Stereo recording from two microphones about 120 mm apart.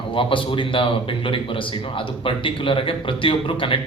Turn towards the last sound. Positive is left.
turn(degrees=45)  # may be behind; listen again after turning